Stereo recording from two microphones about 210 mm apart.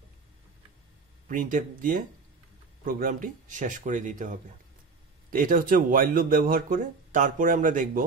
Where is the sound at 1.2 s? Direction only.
40° right (ahead or behind).